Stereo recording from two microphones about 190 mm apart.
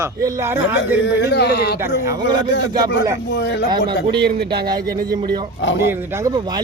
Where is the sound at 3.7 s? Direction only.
25° right (ahead or behind).